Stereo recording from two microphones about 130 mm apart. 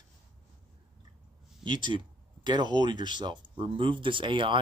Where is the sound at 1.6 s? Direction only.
35° right (ahead or behind).